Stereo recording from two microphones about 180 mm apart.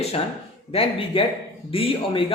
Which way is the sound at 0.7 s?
30° left (ahead or behind).